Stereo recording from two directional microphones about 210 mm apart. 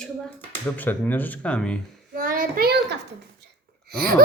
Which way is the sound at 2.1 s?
40° right (ahead or behind).